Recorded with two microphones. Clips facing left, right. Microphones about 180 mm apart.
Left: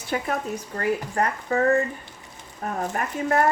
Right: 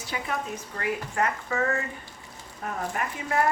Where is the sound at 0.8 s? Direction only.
35° left (ahead or behind).